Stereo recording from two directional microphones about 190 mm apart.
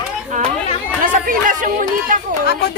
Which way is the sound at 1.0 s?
45° right (ahead or behind).